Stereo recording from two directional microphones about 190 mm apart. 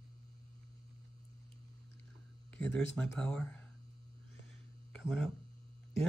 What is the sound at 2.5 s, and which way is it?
Speech, 5° left (ahead or behind).